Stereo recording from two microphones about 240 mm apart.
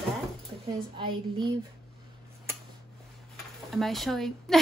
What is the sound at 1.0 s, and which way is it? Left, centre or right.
Speech, centre.